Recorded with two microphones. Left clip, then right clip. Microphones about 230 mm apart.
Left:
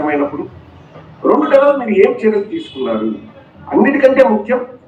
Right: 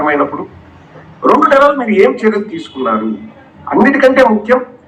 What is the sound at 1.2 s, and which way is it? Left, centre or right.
A man's voice, right.